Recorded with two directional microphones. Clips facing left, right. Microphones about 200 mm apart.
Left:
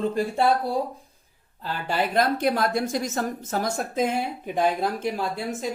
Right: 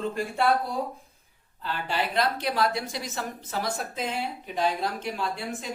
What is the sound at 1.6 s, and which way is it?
A woman's voice, 45° left (ahead or behind).